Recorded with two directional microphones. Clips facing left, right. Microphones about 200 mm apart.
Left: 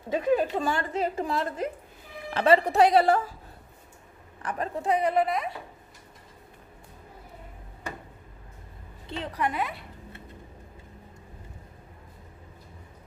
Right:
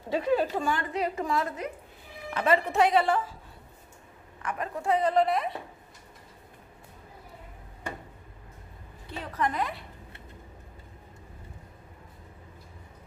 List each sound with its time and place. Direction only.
0.1 s a woman's voice: 15° left (ahead or behind)
0.6 s a woman's voice: 30° left (ahead or behind)
4.4 s a woman's voice: 35° left (ahead or behind)
4.8 s a woman's voice: 15° left (ahead or behind)
5.2 s speech: centre (ahead or behind)
9.3 s a woman's voice: 10° left (ahead or behind)